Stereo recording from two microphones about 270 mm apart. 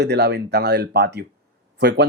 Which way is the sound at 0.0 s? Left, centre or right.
Right.